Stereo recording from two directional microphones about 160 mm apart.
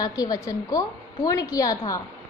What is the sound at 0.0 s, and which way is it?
A woman's voice, 20° left (ahead or behind).